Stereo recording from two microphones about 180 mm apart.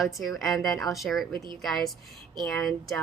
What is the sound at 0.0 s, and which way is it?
Speech, centre (ahead or behind).